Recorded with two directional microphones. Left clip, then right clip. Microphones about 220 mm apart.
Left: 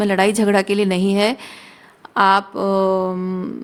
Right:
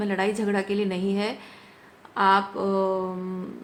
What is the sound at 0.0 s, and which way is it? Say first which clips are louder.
A woman's voice: left 9 dB; 55° left (ahead or behind).